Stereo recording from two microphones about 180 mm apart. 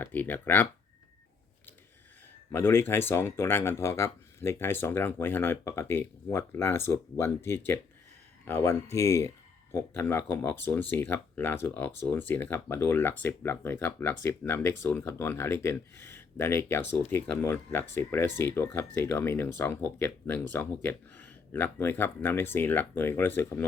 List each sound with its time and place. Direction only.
0.0 s speech: 10° left (ahead or behind)
2.5 s speech: 10° left (ahead or behind)